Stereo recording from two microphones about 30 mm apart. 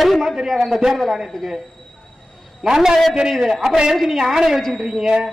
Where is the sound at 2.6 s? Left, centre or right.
Centre.